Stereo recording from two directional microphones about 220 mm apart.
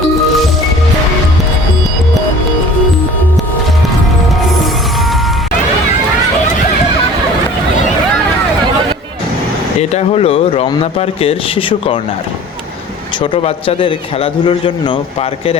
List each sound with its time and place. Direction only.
9.9 s speech: 25° left (ahead or behind)
13.3 s speech: 25° left (ahead or behind)